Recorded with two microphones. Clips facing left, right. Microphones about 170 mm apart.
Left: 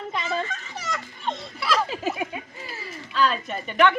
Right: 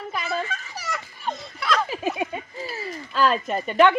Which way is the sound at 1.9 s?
15° right (ahead or behind).